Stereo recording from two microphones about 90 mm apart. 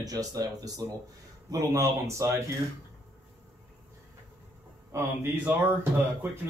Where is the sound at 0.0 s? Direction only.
45° right (ahead or behind).